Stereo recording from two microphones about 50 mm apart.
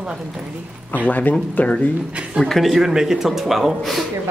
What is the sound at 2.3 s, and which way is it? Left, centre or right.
Speech, centre.